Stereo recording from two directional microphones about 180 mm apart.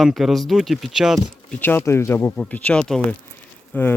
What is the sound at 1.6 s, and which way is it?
Speech, 10° left (ahead or behind).